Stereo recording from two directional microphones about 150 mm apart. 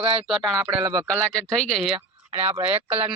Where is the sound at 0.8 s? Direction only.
25° right (ahead or behind).